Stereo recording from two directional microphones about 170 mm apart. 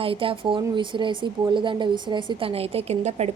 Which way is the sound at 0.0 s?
30° right (ahead or behind).